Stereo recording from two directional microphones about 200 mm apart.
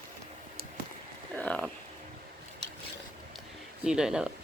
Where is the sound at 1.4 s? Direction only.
5° left (ahead or behind).